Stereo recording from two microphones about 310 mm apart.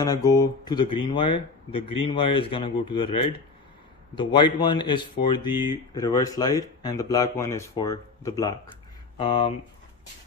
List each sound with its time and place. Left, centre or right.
0.0 s speech: centre